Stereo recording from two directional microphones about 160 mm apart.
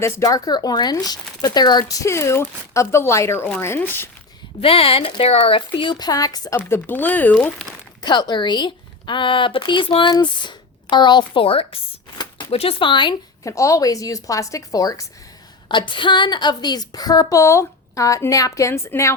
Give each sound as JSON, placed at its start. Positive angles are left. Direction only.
{"t": 0.0, "sound": "speech", "side_deg": 20}
{"t": 4.6, "sound": "speech", "side_deg": 35}
{"t": 6.6, "sound": "speech", "side_deg": 10}
{"t": 8.0, "sound": "a woman's voice", "side_deg": 25}